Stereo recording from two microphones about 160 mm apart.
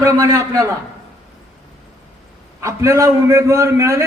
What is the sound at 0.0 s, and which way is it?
Speech, 20° right (ahead or behind).